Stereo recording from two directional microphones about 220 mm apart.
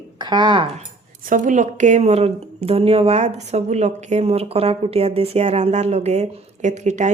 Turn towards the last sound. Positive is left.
turn(degrees=-30)  # may be behind; listen again after turning